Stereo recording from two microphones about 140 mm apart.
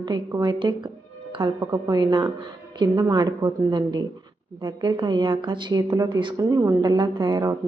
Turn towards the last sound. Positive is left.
turn(degrees=-25)  # may be behind; listen again after turning